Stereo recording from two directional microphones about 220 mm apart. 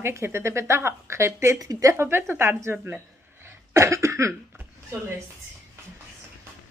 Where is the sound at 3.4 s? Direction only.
10° right (ahead or behind).